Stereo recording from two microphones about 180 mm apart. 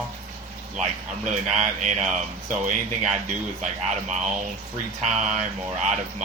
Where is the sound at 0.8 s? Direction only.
40° right (ahead or behind).